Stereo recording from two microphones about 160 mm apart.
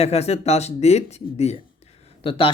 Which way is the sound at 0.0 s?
40° left (ahead or behind).